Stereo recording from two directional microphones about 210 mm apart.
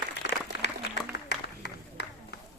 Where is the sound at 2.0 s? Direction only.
55° left (ahead or behind).